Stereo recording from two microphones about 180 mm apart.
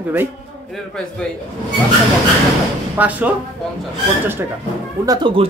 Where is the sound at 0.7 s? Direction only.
5° left (ahead or behind).